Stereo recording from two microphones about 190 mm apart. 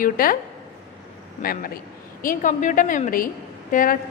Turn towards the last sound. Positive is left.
turn(degrees=45)  # may be behind; listen again after turning